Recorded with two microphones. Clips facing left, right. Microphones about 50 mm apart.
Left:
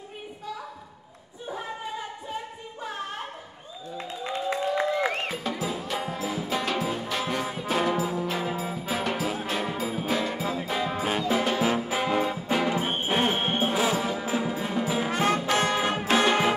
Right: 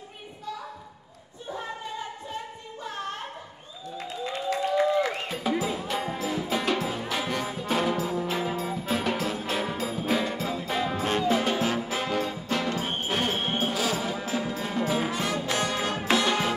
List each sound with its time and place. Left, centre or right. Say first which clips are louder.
4.2 s applause: even; left
5.6 s music: right 1 dB; centre
15.0 s brass instrument: left 4 dB; left
16.1 s music: left 2 dB; left